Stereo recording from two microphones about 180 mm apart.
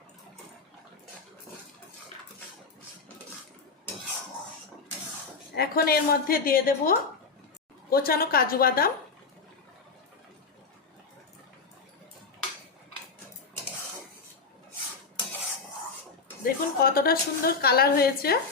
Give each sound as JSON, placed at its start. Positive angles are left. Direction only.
{"t": 5.5, "sound": "a woman's voice", "side_deg": 60}
{"t": 16.4, "sound": "a woman's voice", "side_deg": 55}